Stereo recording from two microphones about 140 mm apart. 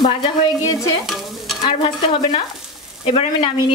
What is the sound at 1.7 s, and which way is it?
Speech, 40° left (ahead or behind).